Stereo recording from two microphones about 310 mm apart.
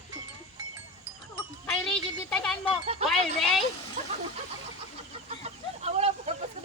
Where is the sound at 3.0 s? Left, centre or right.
Centre.